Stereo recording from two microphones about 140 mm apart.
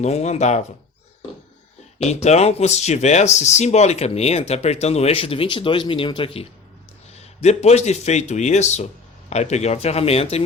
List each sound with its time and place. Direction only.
0.0 s speech: 50° left (ahead or behind)
2.0 s speech: 50° left (ahead or behind)